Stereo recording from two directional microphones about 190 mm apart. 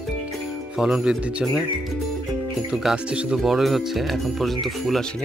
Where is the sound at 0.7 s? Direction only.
Centre (ahead or behind).